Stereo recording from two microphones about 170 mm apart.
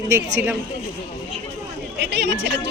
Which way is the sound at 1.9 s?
90° right.